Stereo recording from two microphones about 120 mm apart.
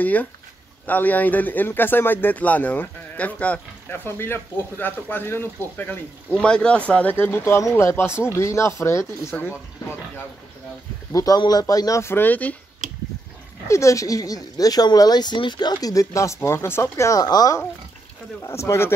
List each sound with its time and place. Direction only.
0.0 s speech: 15° left (ahead or behind)
11.1 s speech: 30° left (ahead or behind); by 12.5 s 15° left (ahead or behind)
13.7 s speech: 25° left (ahead or behind)